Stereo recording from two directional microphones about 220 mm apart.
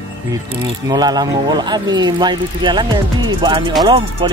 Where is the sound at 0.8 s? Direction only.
20° right (ahead or behind).